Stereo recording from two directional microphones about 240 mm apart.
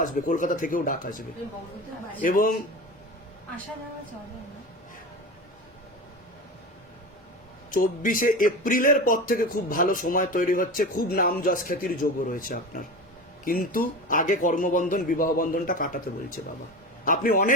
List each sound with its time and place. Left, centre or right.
0.0 s a man's voice: left
2.2 s a man's voice: left
7.7 s a man's voice: left